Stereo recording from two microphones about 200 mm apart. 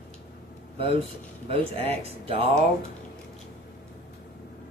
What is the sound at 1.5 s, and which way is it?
Speech, 30° right (ahead or behind).